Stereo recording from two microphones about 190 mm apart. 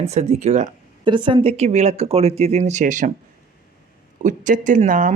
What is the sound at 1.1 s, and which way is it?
Speech, 25° right (ahead or behind).